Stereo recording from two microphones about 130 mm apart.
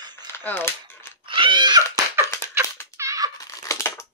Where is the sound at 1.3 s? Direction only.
40° right (ahead or behind).